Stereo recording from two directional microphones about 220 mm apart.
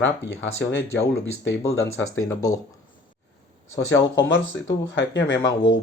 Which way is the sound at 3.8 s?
60° left (ahead or behind).